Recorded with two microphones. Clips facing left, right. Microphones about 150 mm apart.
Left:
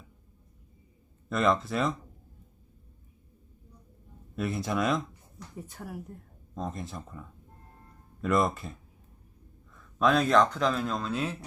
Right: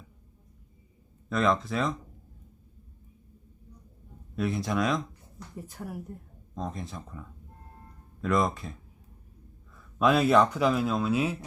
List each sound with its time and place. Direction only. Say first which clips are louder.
1.3 s speech: even; centre (ahead or behind)
4.4 s speech: right 1 dB; centre (ahead or behind)
9.7 s a man's voice: right 1 dB; 5° right (ahead or behind)